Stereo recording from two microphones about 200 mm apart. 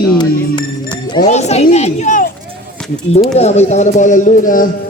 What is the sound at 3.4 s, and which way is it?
Speech, 35° left (ahead or behind).